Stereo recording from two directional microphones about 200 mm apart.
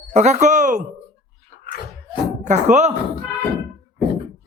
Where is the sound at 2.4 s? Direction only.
35° right (ahead or behind).